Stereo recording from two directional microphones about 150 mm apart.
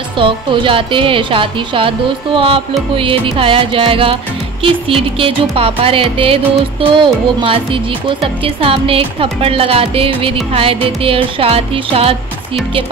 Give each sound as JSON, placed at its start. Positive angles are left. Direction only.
{"t": 0.2, "sound": "music", "side_deg": -35}